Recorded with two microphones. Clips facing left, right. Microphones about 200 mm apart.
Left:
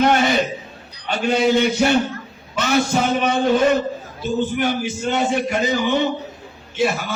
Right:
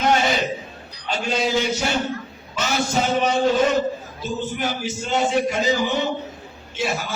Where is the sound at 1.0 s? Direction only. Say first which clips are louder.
Left 5 dB; 60° left (ahead or behind).